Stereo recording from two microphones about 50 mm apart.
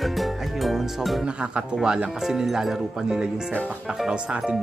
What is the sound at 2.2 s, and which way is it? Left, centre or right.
Speech, centre.